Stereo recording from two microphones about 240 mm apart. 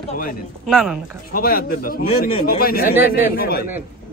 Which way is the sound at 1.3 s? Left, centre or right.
Left.